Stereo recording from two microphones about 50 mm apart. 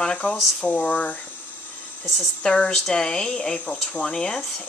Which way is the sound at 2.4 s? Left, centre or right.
Centre.